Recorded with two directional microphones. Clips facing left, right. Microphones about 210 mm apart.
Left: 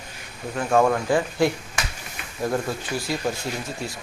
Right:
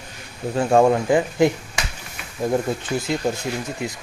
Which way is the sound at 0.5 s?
25° right (ahead or behind).